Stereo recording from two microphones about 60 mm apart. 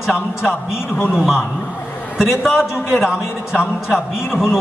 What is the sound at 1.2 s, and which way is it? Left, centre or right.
A man's voice, centre.